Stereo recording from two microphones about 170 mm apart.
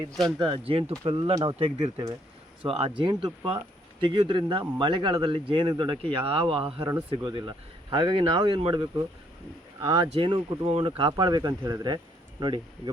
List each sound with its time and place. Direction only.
0.3 s speech: 30° right (ahead or behind)